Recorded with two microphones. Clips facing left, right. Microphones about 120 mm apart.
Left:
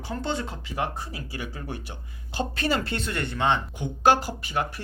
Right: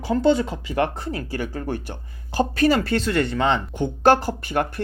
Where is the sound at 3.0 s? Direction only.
90° right.